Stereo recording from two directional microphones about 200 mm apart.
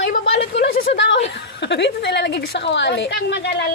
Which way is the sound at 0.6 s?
60° left (ahead or behind).